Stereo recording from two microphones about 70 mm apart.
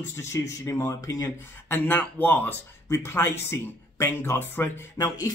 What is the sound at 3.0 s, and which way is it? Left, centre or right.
Speech, left.